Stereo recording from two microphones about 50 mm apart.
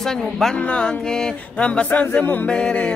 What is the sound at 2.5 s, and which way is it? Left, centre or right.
Music, centre.